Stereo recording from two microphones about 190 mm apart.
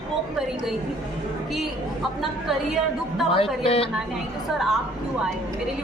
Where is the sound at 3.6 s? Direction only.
30° left (ahead or behind).